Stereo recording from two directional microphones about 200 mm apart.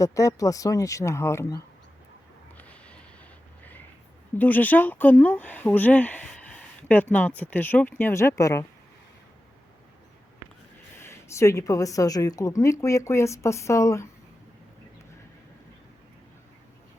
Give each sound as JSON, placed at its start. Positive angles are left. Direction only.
{"t": 0.0, "sound": "speech", "side_deg": 15}
{"t": 2.6, "sound": "a sound", "side_deg": 5}
{"t": 4.4, "sound": "speech", "side_deg": 10}
{"t": 10.9, "sound": "speech", "side_deg": 15}